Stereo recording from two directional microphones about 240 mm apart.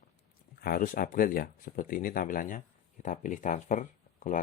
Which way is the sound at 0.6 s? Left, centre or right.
Left.